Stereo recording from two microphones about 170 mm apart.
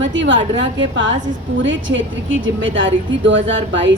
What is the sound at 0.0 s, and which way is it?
A woman's voice, 90° right.